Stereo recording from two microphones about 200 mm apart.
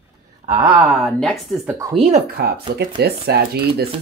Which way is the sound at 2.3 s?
50° right (ahead or behind).